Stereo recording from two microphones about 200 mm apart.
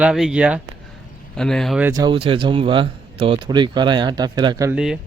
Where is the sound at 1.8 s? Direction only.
20° right (ahead or behind).